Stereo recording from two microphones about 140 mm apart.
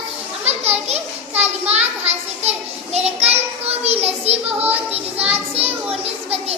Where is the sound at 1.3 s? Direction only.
50° right (ahead or behind).